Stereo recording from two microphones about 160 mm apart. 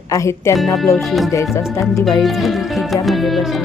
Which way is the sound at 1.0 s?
Centre (ahead or behind).